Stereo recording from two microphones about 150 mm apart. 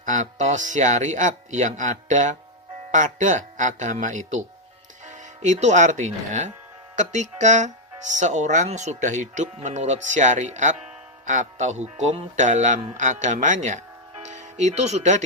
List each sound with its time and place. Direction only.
0.0 s speech: 55° right (ahead or behind)